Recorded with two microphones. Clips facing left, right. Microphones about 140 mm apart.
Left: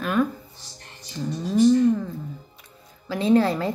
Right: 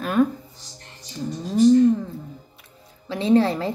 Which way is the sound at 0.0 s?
35° right (ahead or behind).